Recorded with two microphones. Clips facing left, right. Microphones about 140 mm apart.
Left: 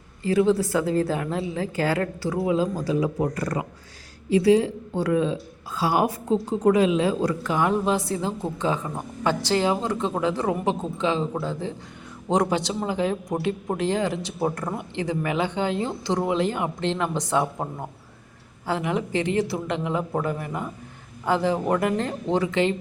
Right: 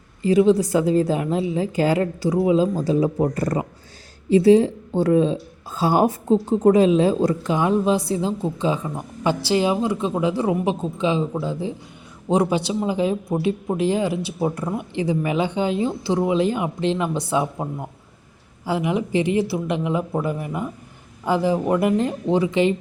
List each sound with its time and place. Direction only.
0.3 s a woman's voice: 20° right (ahead or behind)
18.6 s speech: 15° right (ahead or behind)